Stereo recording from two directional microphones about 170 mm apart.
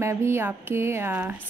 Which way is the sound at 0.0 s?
15° right (ahead or behind).